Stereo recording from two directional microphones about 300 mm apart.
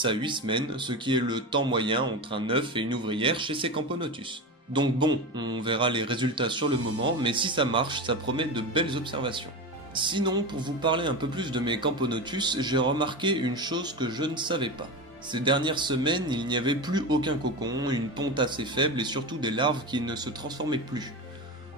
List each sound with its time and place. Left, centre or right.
0.0 s speech: centre